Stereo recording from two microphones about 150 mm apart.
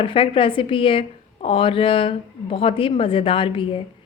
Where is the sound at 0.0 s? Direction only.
35° left (ahead or behind).